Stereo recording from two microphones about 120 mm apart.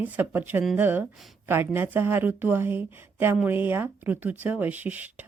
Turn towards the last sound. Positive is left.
turn(degrees=-15)  # may be behind; listen again after turning